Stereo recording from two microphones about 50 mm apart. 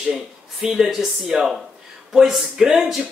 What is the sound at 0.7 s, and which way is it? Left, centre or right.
Speech, centre.